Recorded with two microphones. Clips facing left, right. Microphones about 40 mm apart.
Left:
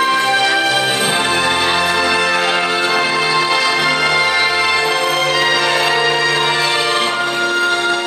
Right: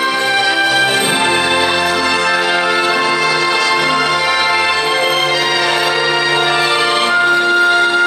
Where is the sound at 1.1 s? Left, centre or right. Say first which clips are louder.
Right 2 dB; centre.